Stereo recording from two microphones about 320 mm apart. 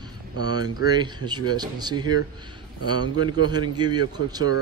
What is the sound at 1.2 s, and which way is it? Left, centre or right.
Speech, centre.